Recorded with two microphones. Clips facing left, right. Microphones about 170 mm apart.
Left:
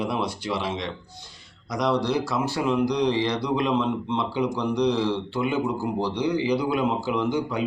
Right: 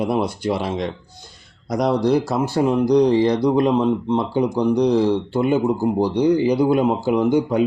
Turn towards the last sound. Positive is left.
turn(degrees=-50)  # may be behind; listen again after turning